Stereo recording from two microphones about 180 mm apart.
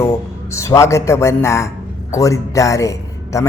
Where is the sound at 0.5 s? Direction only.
15° left (ahead or behind).